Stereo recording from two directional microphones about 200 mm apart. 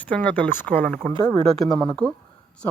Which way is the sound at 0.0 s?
5° left (ahead or behind).